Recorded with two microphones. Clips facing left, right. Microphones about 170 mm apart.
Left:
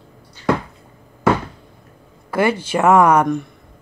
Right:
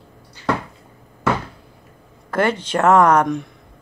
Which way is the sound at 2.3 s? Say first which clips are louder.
Left 1 dB; 10° left (ahead or behind).